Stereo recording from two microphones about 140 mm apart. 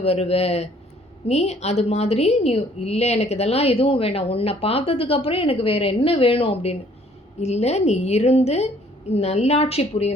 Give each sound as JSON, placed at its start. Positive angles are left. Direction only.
{"t": 0.0, "sound": "a woman's voice", "side_deg": 45}